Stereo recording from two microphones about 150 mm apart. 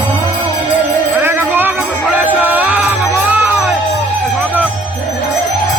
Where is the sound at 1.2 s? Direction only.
15° right (ahead or behind).